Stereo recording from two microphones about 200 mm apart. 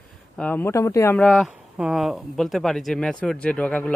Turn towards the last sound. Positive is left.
turn(degrees=5)  # may be behind; listen again after turning